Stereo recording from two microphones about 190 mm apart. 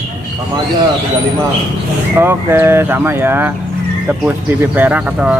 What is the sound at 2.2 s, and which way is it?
Speech, 10° right (ahead or behind).